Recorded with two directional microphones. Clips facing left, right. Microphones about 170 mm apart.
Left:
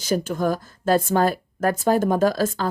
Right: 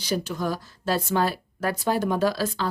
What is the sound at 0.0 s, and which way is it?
A woman's voice, 50° left (ahead or behind).